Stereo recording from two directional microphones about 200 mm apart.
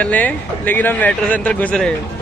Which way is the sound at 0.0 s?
5° left (ahead or behind).